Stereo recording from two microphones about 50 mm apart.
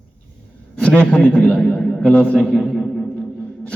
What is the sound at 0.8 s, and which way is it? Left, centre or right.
A man's voice, left.